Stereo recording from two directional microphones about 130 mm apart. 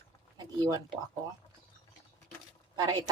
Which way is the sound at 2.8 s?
30° right (ahead or behind).